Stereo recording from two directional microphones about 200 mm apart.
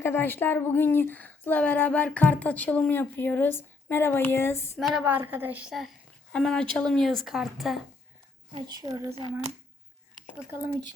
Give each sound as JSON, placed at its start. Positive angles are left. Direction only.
{"t": 0.0, "sound": "speech", "side_deg": 10}
{"t": 4.8, "sound": "a woman's voice", "side_deg": -5}
{"t": 8.5, "sound": "speech", "side_deg": -20}